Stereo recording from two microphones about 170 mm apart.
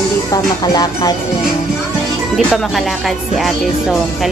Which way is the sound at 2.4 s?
Centre (ahead or behind).